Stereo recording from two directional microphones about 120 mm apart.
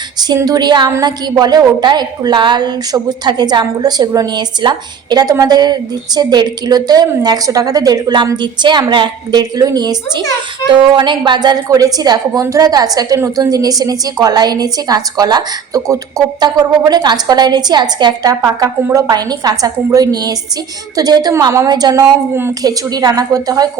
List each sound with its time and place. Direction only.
0.3 s a woman's voice: 30° right (ahead or behind)